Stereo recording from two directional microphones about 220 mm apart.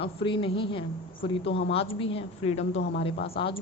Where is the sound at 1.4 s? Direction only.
55° left (ahead or behind).